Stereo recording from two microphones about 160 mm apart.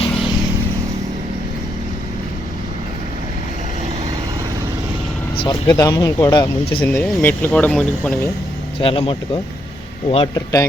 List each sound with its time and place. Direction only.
5.4 s speech: 30° left (ahead or behind)
5.7 s speech: 20° left (ahead or behind)
6.8 s speech: 10° left (ahead or behind)
8.8 s speech: 35° left (ahead or behind)
10.3 s speech: 20° left (ahead or behind)